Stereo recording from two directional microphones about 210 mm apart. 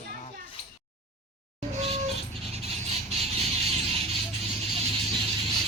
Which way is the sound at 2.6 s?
30° right (ahead or behind).